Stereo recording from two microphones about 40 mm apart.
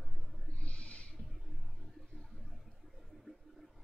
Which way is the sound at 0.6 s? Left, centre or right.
Left.